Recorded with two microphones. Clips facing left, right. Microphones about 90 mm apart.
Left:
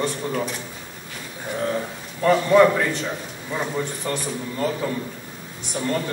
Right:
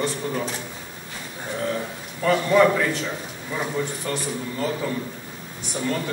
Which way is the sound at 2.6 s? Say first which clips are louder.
Left 2 dB; centre (ahead or behind).